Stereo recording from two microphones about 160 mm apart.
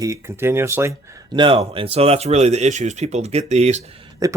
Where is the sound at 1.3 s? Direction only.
30° right (ahead or behind).